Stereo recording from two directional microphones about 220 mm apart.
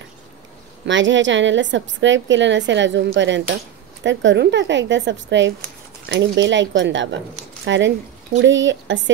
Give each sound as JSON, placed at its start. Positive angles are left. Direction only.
{"t": 0.8, "sound": "a woman's voice", "side_deg": -55}